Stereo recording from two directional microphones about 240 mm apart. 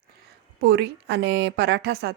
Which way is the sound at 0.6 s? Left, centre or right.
Right.